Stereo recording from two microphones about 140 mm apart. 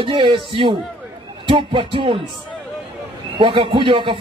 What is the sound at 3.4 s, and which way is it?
Speech, 40° right (ahead or behind).